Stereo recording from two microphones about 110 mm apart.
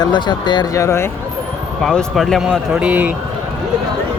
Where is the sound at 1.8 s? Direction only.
5° left (ahead or behind).